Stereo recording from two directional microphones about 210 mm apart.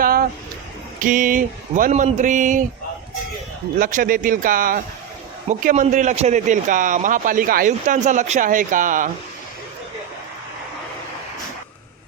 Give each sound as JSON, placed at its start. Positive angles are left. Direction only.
{"t": 0.0, "sound": "a sound", "side_deg": -45}
{"t": 1.0, "sound": "a man's voice", "side_deg": -40}
{"t": 3.8, "sound": "a man's voice", "side_deg": -40}